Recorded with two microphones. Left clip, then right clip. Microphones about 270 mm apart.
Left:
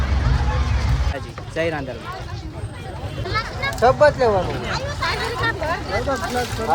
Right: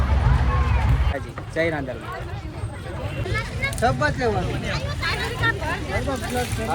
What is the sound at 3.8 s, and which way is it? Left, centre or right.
Speech, left.